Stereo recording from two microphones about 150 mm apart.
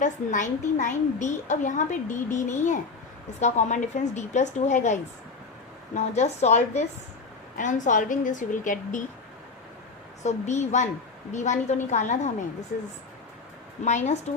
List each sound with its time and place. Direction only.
0.0 s a woman's voice: 55° left (ahead or behind)
10.2 s a woman's voice: 50° left (ahead or behind)
13.8 s a woman's voice: 50° left (ahead or behind)